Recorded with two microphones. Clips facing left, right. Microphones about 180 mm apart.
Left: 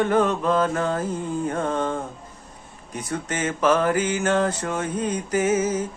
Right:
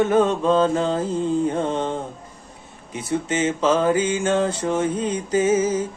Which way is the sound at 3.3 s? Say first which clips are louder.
Right 1 dB; 25° right (ahead or behind).